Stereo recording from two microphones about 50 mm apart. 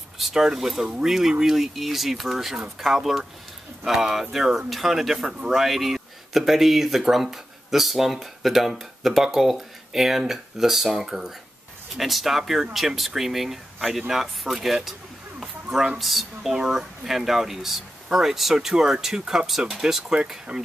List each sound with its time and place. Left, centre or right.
0.3 s speech: centre
15.4 s a sound: centre
16.0 s speech: centre